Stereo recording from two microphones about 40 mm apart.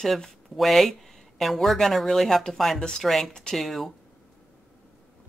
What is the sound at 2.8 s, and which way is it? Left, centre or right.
Speech, left.